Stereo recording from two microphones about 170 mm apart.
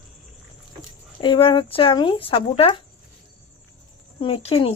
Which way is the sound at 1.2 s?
30° left (ahead or behind).